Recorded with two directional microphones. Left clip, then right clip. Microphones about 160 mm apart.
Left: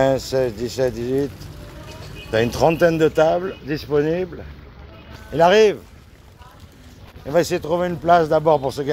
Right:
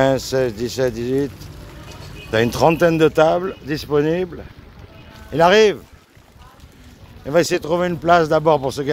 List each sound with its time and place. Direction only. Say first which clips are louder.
0.0 s speech: right 1 dB; 30° right (ahead or behind)
2.3 s speech: right 2 dB; 30° right (ahead or behind)
5.3 s speech: right 1 dB; 30° right (ahead or behind)
7.2 s speech: right 2 dB; 40° right (ahead or behind)